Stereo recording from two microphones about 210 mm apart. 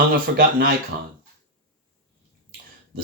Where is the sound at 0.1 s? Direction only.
45° right (ahead or behind).